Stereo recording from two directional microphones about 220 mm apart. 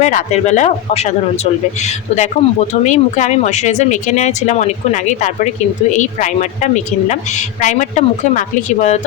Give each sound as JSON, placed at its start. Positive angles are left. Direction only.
{"t": 0.0, "sound": "speech", "side_deg": 35}